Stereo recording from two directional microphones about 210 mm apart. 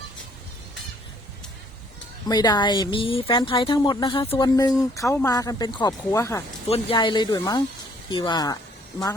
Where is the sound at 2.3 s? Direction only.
20° left (ahead or behind).